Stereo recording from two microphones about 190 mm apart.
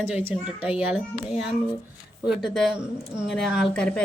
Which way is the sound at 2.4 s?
Centre (ahead or behind).